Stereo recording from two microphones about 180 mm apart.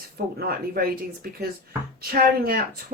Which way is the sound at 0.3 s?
55° right (ahead or behind).